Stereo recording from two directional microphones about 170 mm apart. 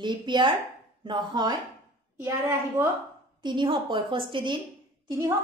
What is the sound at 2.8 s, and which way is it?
Speech, 15° right (ahead or behind).